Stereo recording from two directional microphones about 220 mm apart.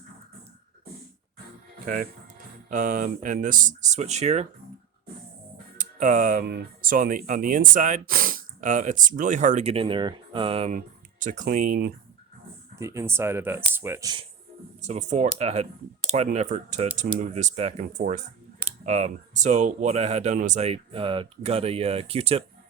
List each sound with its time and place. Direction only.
2.6 s speech: 35° right (ahead or behind)
5.7 s speech: 35° right (ahead or behind)
12.8 s speech: 15° right (ahead or behind)
14.8 s speech: 30° right (ahead or behind)